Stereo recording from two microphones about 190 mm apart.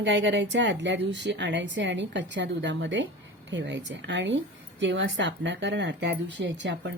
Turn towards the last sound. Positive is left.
turn(degrees=-65)  # may be behind; listen again after turning